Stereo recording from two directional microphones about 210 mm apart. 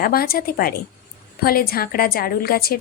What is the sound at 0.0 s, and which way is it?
A woman's voice, 45° left (ahead or behind).